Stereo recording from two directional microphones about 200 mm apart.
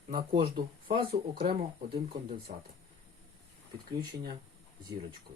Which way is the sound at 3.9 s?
20° right (ahead or behind).